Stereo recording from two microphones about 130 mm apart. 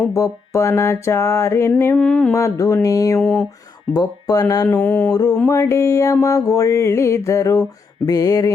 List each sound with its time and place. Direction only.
0.1 s mantra: 25° left (ahead or behind)
2.0 s mantra: 5° left (ahead or behind)
2.3 s mantra: 25° left (ahead or behind)
3.2 s a sound: centre (ahead or behind)
3.9 s mantra: 25° left (ahead or behind)
4.7 s mantra: 15° left (ahead or behind)
5.5 s mantra: 25° left (ahead or behind)